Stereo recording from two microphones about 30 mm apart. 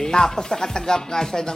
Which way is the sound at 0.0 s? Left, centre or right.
Left.